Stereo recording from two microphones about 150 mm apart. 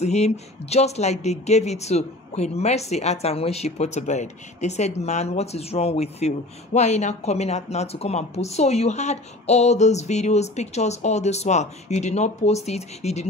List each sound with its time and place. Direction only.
0.0 s speech: 45° left (ahead or behind)